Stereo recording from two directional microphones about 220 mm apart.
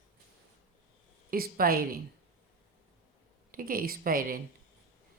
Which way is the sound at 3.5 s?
40° right (ahead or behind).